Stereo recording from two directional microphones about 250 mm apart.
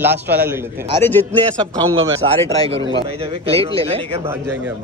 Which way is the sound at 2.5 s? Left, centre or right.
Right.